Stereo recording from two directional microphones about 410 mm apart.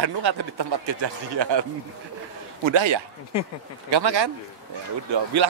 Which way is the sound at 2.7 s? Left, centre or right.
Right.